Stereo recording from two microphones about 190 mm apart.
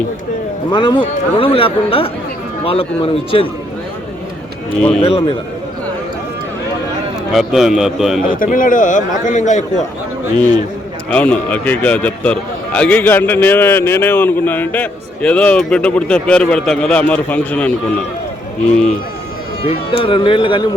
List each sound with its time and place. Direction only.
0.7 s speech: 25° left (ahead or behind)
4.9 s speech: 30° left (ahead or behind)
7.3 s a man's voice: centre (ahead or behind)
8.4 s a man's voice: 45° left (ahead or behind)
11.1 s a man's voice: 5° left (ahead or behind)
19.6 s speech: 30° left (ahead or behind)